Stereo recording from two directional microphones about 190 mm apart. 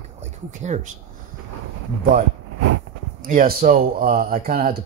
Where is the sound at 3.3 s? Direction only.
50° right (ahead or behind).